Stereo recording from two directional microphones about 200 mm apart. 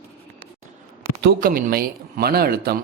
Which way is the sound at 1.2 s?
50° right (ahead or behind).